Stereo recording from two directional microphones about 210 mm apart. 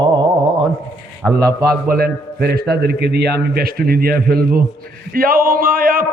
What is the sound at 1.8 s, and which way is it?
Music, 45° right (ahead or behind).